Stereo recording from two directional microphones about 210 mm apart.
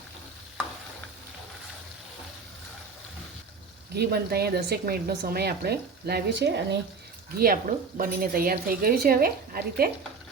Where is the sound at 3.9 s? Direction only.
50° right (ahead or behind).